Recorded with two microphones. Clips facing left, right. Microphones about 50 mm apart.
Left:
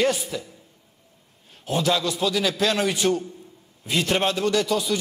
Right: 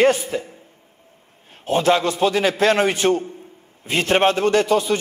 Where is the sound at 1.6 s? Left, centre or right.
Right.